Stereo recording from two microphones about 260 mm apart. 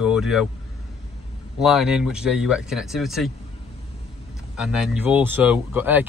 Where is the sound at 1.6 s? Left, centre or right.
Centre.